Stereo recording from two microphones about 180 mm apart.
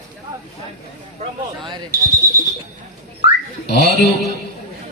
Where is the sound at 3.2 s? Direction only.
65° left (ahead or behind).